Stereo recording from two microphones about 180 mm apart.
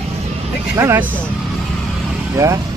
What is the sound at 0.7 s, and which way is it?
Speech, 15° right (ahead or behind).